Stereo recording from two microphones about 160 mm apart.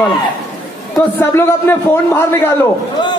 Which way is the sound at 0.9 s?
10° left (ahead or behind).